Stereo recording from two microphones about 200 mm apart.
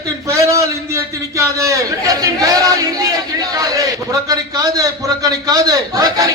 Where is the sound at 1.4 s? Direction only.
15° right (ahead or behind).